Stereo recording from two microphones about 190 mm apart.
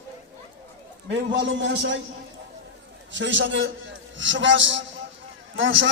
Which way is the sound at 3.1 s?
75° right (ahead or behind).